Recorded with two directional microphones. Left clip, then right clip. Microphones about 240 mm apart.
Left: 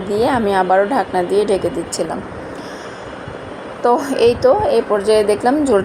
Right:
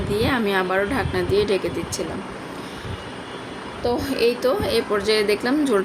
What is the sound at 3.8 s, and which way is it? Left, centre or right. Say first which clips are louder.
A woman's voice: left 8 dB; centre.